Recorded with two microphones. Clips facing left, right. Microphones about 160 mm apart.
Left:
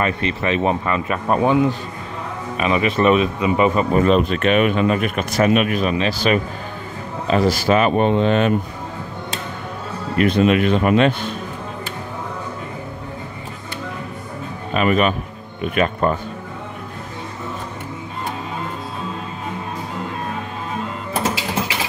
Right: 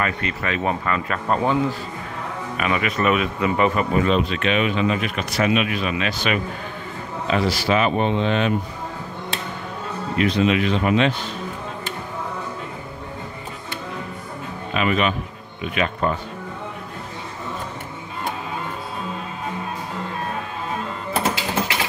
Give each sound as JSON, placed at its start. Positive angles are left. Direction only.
{"t": 0.0, "sound": "speech", "side_deg": 25}
{"t": 3.3, "sound": "speech", "side_deg": 20}
{"t": 3.9, "sound": "speech", "side_deg": 45}
{"t": 10.1, "sound": "speech", "side_deg": 50}
{"t": 14.7, "sound": "a man's voice", "side_deg": 45}